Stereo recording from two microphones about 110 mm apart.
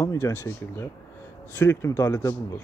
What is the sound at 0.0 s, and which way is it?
Speech, 25° left (ahead or behind).